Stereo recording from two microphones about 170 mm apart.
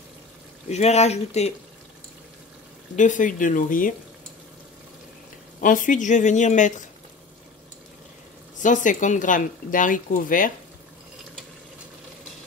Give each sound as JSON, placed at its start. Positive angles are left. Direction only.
{"t": 0.7, "sound": "speech", "side_deg": 40}
{"t": 3.0, "sound": "speech", "side_deg": 50}
{"t": 5.6, "sound": "speech", "side_deg": 50}
{"t": 8.5, "sound": "speech", "side_deg": 50}